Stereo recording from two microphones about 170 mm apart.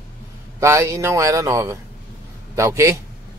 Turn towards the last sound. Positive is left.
turn(degrees=-15)  # may be behind; listen again after turning